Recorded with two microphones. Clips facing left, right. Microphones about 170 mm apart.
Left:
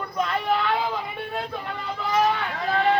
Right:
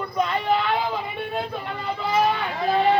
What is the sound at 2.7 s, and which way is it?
Speech, 30° right (ahead or behind).